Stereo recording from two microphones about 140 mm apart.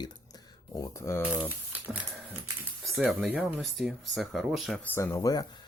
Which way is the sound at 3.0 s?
5° right (ahead or behind).